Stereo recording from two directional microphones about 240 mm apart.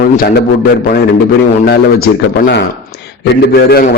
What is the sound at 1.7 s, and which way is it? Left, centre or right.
A man's voice, left.